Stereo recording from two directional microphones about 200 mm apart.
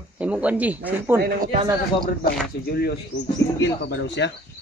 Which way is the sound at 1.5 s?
20° right (ahead or behind).